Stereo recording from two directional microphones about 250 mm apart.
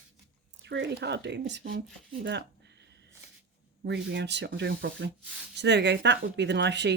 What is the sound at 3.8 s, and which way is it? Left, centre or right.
Speech, right.